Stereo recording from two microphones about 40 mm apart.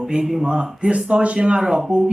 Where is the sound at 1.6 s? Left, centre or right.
Centre.